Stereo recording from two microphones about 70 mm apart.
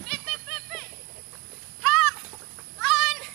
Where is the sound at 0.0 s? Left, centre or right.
Centre.